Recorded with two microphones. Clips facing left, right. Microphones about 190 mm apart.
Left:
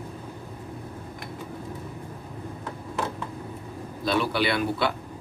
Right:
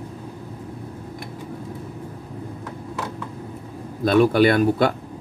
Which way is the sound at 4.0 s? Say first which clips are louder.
Right 9 dB; 50° right (ahead or behind).